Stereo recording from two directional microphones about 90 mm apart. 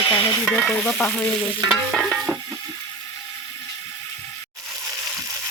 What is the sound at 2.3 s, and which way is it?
Frying, 30° right (ahead or behind).